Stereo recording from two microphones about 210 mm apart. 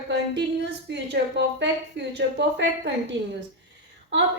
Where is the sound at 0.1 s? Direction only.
55° right (ahead or behind).